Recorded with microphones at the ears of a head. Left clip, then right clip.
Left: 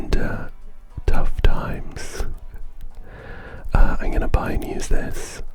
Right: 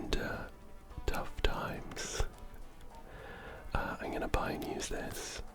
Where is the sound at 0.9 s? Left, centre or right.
Left.